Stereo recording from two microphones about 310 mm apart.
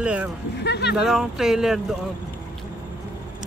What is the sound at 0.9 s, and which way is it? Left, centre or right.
Speech, centre.